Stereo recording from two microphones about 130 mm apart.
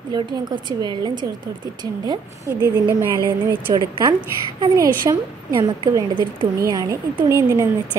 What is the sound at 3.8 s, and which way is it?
A woman's voice, 30° right (ahead or behind).